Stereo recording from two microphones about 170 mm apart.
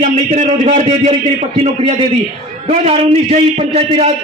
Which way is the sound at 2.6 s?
40° right (ahead or behind).